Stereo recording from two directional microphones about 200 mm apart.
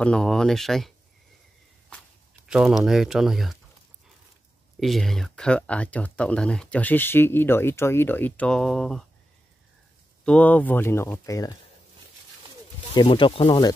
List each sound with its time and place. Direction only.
0.0 s speech: 5° left (ahead or behind)
2.4 s speech: centre (ahead or behind)
4.7 s speech: centre (ahead or behind)
10.2 s speech: 5° left (ahead or behind)
12.9 s speech: 25° left (ahead or behind)